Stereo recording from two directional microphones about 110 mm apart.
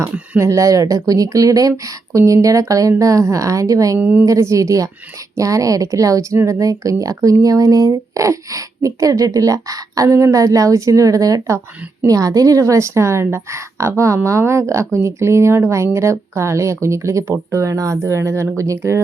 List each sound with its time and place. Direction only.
0.3 s speech: 30° right (ahead or behind)
3.9 s a woman's voice: 15° right (ahead or behind)
4.3 s speech: 30° right (ahead or behind)